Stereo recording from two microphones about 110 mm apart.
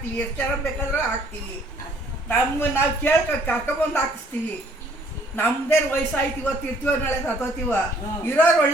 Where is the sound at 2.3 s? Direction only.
20° left (ahead or behind).